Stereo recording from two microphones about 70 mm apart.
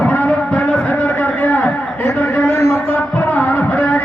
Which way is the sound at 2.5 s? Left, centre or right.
Left.